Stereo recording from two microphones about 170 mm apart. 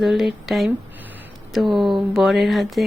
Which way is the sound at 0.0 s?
Centre (ahead or behind).